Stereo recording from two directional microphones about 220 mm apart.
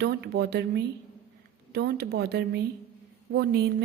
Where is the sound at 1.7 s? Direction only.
50° right (ahead or behind).